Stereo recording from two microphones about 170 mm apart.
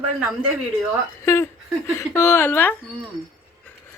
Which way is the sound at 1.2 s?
15° left (ahead or behind).